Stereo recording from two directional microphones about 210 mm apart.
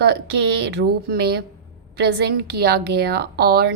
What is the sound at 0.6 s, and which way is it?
A woman's voice, 50° right (ahead or behind).